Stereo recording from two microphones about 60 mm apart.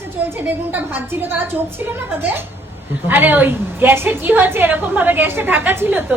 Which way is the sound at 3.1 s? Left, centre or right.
Right.